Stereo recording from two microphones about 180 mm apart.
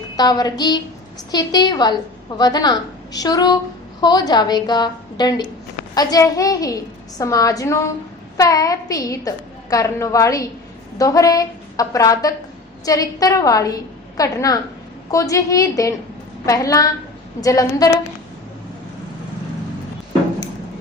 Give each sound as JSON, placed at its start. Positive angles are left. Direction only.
{"t": 0.2, "sound": "a woman's voice", "side_deg": 20}